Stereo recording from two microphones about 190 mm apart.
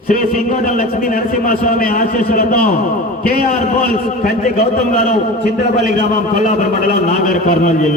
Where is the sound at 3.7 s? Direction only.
45° left (ahead or behind).